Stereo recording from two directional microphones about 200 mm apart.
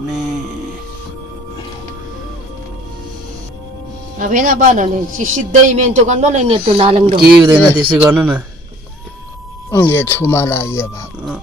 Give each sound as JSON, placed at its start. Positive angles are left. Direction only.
{"t": 0.0, "sound": "music", "side_deg": 0}
{"t": 4.2, "sound": "a man's voice", "side_deg": -45}
{"t": 7.4, "sound": "speech", "side_deg": -10}
{"t": 9.7, "sound": "speech", "side_deg": 15}